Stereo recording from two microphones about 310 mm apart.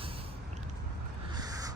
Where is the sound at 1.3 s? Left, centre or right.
Centre.